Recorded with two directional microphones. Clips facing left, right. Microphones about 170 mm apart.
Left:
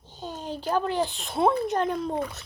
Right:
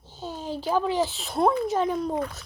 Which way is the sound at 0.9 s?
5° right (ahead or behind).